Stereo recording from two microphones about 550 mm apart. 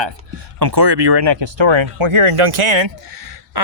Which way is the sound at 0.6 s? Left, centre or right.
Right.